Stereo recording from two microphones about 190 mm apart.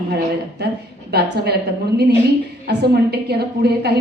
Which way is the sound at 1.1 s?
60° right (ahead or behind).